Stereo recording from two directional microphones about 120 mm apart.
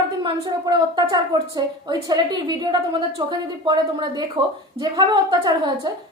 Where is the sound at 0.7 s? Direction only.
35° right (ahead or behind).